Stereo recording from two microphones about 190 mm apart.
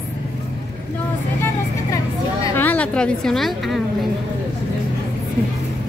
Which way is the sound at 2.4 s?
10° left (ahead or behind).